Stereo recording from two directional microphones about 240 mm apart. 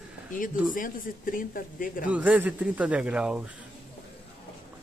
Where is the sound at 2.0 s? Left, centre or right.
Centre.